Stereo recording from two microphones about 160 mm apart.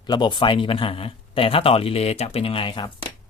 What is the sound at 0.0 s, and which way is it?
A man's voice, 30° left (ahead or behind).